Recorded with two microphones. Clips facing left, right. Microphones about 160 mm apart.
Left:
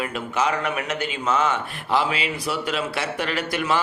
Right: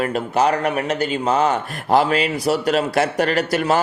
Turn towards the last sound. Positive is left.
turn(degrees=-40)  # may be behind; listen again after turning